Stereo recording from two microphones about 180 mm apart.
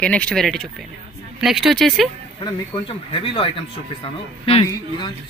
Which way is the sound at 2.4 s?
25° left (ahead or behind).